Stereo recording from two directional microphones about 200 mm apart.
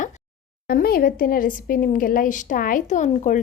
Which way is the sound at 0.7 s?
50° left (ahead or behind).